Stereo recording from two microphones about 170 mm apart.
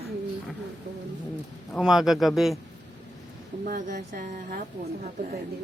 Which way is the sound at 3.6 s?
50° right (ahead or behind).